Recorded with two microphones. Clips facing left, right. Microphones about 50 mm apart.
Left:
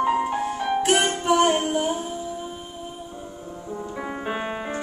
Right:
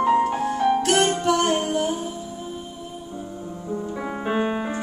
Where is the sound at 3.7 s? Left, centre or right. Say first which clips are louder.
Right 3 dB; centre.